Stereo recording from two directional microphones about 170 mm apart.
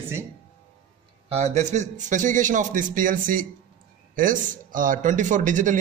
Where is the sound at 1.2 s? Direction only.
40° right (ahead or behind).